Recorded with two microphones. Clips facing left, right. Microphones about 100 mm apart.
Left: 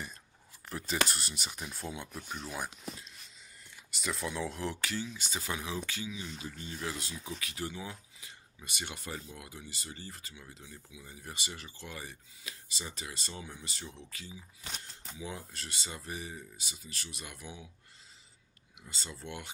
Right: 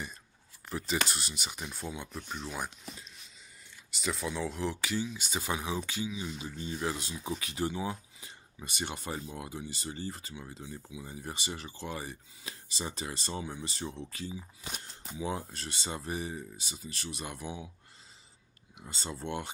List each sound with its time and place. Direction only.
0.7 s speech: 5° right (ahead or behind)
4.9 s speech: 15° right (ahead or behind); by 14.4 s 30° right (ahead or behind)
14.6 s speech: 5° right (ahead or behind)
15.1 s speech: 30° right (ahead or behind)
18.8 s speech: 35° right (ahead or behind)